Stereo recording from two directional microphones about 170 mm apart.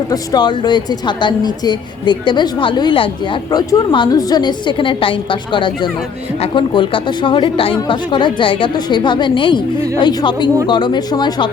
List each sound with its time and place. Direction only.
0.1 s a woman's voice: 25° left (ahead or behind)